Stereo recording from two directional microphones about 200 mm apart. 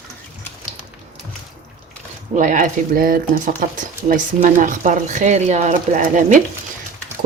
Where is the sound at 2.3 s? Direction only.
40° right (ahead or behind).